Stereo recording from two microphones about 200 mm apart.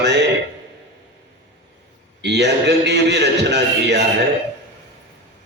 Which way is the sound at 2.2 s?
60° right (ahead or behind).